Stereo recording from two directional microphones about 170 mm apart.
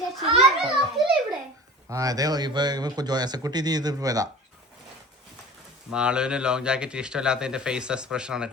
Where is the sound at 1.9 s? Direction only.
20° right (ahead or behind).